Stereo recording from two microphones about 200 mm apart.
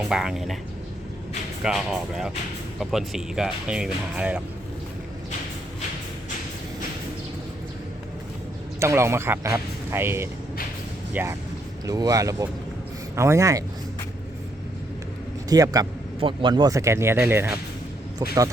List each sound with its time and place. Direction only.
0.1 s speech: centre (ahead or behind)
1.6 s speech: centre (ahead or behind)
8.8 s speech: 15° right (ahead or behind)
15.4 s speech: 15° right (ahead or behind)